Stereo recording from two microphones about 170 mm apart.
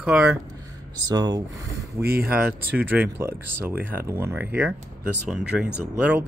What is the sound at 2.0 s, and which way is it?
Speech, 65° right (ahead or behind).